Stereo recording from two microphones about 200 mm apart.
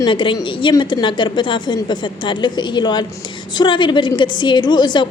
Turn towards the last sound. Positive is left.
turn(degrees=20)  # may be behind; listen again after turning